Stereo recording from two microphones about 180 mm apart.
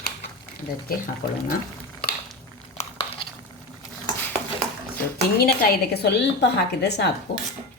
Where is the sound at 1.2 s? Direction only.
55° left (ahead or behind).